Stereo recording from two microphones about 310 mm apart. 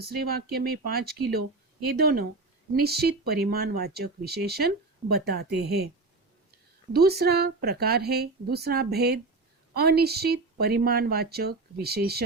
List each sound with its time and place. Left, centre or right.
0.1 s speech: right
6.9 s speech: right